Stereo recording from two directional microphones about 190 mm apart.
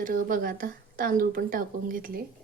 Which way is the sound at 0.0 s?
45° right (ahead or behind).